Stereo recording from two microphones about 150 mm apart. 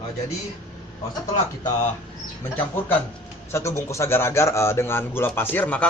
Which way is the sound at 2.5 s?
10° left (ahead or behind).